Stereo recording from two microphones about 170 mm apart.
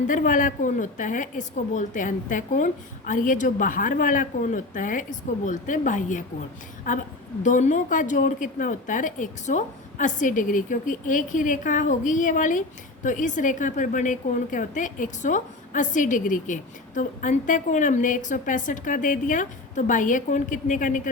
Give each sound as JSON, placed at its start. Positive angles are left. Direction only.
{"t": 0.1, "sound": "a woman's voice", "side_deg": 50}